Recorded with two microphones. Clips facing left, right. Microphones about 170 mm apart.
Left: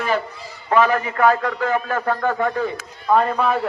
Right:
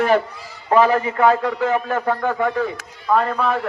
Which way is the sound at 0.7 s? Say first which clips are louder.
Right 2 dB; 30° right (ahead or behind).